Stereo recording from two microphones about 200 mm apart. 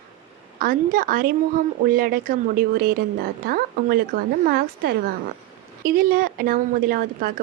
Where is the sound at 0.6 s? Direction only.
45° right (ahead or behind).